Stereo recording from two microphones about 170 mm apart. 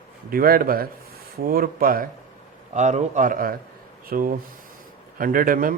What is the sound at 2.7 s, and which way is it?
Speech, 45° right (ahead or behind).